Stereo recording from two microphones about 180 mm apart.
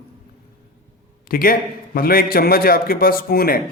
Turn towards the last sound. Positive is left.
turn(degrees=55)  # may be behind; listen again after turning